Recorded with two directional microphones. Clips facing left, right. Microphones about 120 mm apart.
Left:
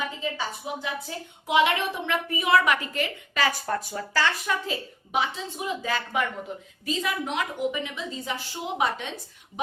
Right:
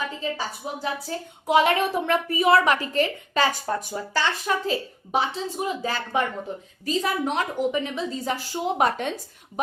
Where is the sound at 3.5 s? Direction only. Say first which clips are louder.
Right 1 dB; 20° right (ahead or behind).